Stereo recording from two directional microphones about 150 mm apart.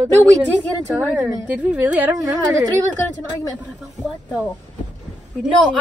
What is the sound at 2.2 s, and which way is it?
Speech, 25° right (ahead or behind).